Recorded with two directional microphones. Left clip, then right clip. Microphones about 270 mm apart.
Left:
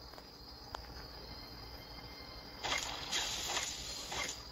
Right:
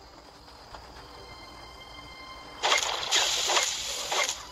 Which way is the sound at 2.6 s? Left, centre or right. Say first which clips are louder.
Right 13 dB; right.